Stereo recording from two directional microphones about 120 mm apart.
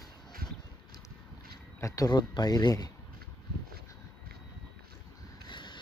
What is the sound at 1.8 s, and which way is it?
Speech, 30° left (ahead or behind).